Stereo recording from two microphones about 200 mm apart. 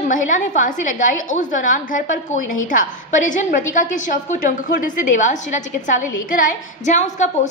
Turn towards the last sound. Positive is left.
turn(degrees=35)  # may be behind; listen again after turning